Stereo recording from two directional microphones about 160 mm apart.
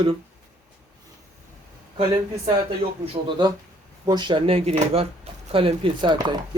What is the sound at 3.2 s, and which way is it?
Speech, 30° right (ahead or behind).